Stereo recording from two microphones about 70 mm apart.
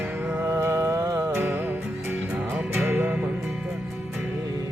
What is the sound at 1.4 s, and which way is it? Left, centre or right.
Music, right.